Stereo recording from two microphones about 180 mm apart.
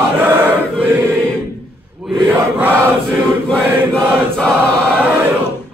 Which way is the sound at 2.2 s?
10° right (ahead or behind).